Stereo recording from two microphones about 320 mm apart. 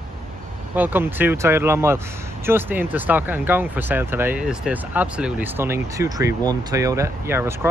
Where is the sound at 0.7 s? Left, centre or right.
Centre.